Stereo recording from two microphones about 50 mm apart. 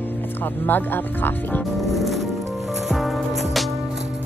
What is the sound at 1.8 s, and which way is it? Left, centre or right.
Music, centre.